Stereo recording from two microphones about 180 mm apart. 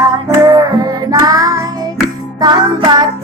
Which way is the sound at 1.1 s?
20° right (ahead or behind).